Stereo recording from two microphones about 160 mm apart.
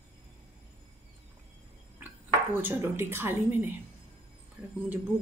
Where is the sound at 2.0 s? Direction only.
10° right (ahead or behind).